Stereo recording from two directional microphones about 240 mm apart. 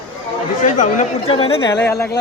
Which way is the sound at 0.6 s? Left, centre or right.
Left.